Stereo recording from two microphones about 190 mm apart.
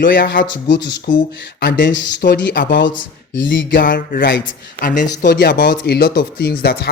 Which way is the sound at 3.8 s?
45° left (ahead or behind).